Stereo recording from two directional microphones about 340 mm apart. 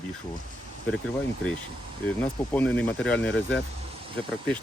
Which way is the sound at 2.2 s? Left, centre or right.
Centre.